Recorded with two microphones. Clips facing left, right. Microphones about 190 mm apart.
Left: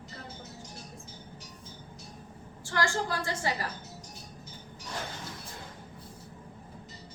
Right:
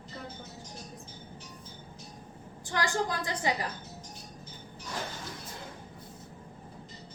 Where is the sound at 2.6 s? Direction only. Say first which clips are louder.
Even; 20° right (ahead or behind).